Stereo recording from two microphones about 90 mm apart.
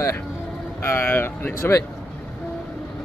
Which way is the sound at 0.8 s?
25° left (ahead or behind).